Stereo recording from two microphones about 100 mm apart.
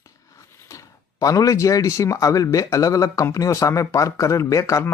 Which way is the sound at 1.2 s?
35° left (ahead or behind).